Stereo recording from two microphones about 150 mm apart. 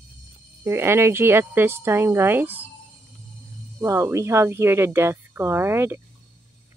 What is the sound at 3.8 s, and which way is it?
Speech, 20° right (ahead or behind).